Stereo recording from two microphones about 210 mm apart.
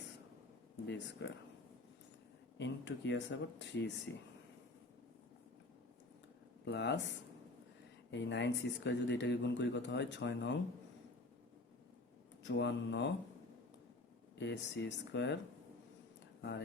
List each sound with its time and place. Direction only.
0.9 s speech: 55° left (ahead or behind)
2.6 s speech: 55° left (ahead or behind)
6.7 s speech: 55° left (ahead or behind)
8.1 s speech: 55° left (ahead or behind)
12.4 s speech: 55° left (ahead or behind)
14.3 s speech: 55° left (ahead or behind)
16.4 s speech: 55° left (ahead or behind)